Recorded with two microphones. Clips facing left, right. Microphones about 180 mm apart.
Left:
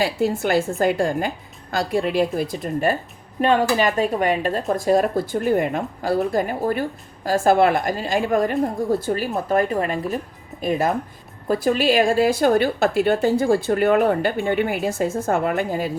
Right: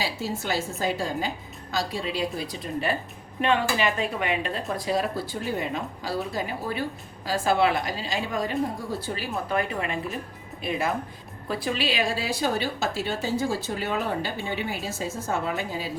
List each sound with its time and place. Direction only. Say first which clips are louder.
0.0 s a woman's voice: left 9 dB; 55° left (ahead or behind)